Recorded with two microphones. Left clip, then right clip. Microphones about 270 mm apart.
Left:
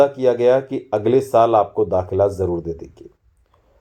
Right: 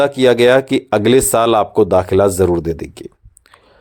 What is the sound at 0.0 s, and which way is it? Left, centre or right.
Speech, right.